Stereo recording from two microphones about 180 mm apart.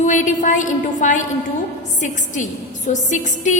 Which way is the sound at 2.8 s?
45° left (ahead or behind).